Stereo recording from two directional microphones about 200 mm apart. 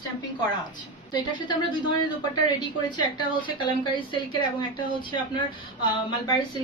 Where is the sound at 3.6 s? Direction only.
20° left (ahead or behind).